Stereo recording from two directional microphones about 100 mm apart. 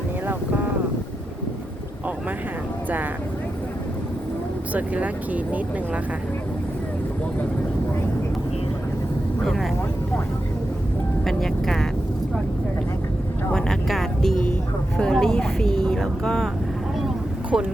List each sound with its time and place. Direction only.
4.7 s speech: 15° right (ahead or behind)
9.4 s speech: 5° left (ahead or behind)
11.3 s speech: 5° left (ahead or behind)
13.5 s speech: 5° left (ahead or behind)
17.5 s speech: centre (ahead or behind)